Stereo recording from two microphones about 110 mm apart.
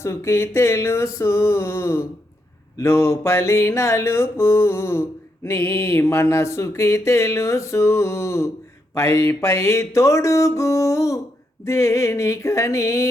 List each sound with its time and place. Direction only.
0.0 s mantra: 25° left (ahead or behind)